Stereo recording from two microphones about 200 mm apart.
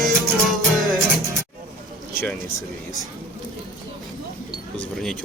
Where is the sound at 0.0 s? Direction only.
Centre (ahead or behind).